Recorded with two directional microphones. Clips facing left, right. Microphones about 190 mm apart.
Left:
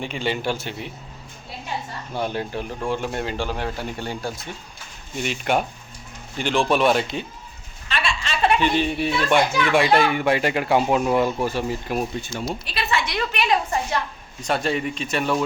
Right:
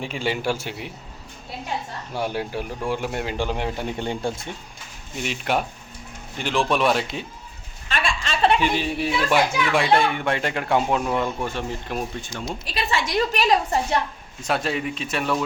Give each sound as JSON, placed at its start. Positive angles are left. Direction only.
{"t": 0.0, "sound": "speech", "side_deg": -5}
{"t": 2.1, "sound": "speech", "side_deg": -10}
{"t": 5.1, "sound": "speech", "side_deg": 0}
{"t": 7.9, "sound": "a sound", "side_deg": -45}
{"t": 8.5, "sound": "speech", "side_deg": -5}
{"t": 12.6, "sound": "a woman's voice", "side_deg": -40}
{"t": 14.4, "sound": "speech", "side_deg": 0}